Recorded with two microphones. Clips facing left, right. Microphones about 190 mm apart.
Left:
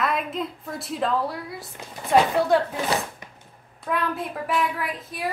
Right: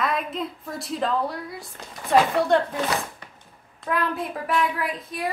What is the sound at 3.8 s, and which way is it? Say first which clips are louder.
A woman's voice: right 1 dB; centre (ahead or behind).